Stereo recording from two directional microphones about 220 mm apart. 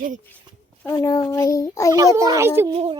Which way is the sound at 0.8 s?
15° left (ahead or behind).